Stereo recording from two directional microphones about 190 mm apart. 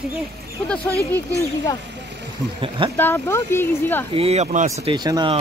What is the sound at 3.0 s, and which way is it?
Speech, 10° left (ahead or behind).